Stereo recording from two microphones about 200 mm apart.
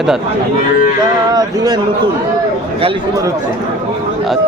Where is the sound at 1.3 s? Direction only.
20° right (ahead or behind).